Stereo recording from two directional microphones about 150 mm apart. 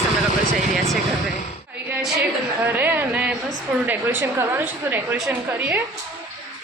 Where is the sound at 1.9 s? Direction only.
5° right (ahead or behind).